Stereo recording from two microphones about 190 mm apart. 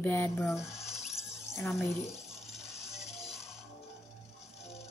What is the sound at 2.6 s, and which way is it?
Music, 35° left (ahead or behind).